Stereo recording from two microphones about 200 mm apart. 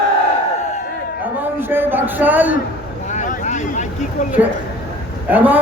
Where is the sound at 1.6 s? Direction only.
10° right (ahead or behind).